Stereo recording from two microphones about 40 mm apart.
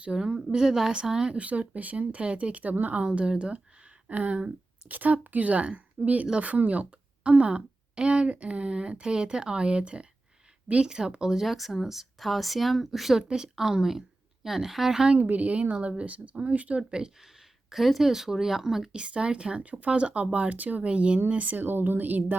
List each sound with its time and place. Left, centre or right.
0.2 s a woman's voice: centre
1.4 s speech: right
3.2 s speech: right
4.9 s a woman's voice: right; by 11.4 s centre
11.4 s speech: centre
13.2 s a woman's voice: centre
15.2 s speech: right
17.7 s a woman's voice: centre
18.9 s speech: right